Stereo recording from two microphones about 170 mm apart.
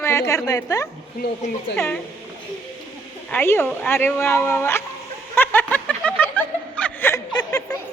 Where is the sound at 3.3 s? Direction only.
15° left (ahead or behind).